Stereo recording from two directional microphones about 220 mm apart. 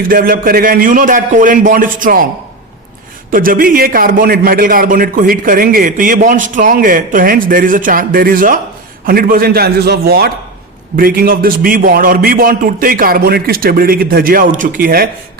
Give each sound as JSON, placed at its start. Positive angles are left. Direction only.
{"t": 0.1, "sound": "a man's voice", "side_deg": -40}
{"t": 3.3, "sound": "a man's voice", "side_deg": -40}